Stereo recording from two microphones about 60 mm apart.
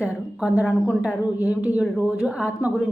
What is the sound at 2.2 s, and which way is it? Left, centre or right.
Speech, centre.